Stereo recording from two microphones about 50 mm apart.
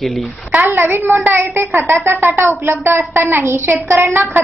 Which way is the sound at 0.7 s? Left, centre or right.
Right.